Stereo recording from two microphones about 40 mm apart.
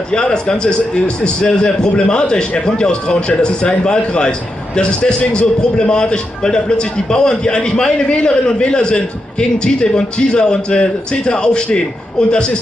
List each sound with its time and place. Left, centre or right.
0.1 s a man's voice: left